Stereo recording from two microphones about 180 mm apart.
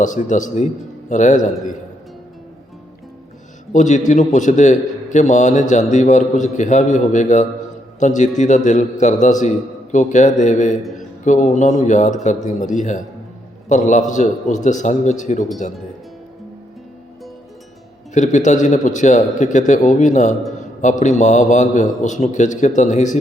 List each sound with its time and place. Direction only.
0.0 s a man's voice: 45° left (ahead or behind)
3.7 s a man's voice: 40° left (ahead or behind)
18.1 s a man's voice: 45° left (ahead or behind)